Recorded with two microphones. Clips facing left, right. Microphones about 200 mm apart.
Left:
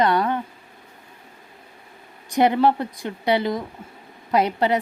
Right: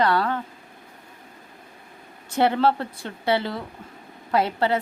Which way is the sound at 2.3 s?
15° left (ahead or behind).